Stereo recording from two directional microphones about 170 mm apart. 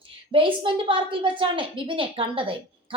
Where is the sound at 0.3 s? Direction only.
30° right (ahead or behind).